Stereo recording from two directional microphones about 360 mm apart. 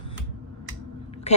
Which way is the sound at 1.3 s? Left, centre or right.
Centre.